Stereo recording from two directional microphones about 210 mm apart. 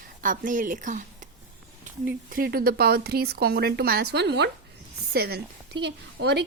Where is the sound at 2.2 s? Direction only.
45° right (ahead or behind).